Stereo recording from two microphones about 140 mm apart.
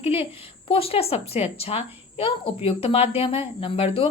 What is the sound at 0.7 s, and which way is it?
A woman's voice, 45° left (ahead or behind).